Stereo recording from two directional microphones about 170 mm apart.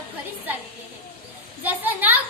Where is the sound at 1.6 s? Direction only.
10° right (ahead or behind).